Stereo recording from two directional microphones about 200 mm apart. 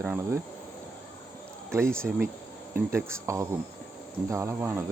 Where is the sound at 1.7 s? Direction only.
15° right (ahead or behind).